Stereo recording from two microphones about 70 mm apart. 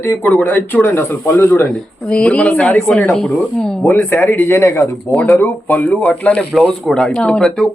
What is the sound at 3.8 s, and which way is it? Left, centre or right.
Speech, left.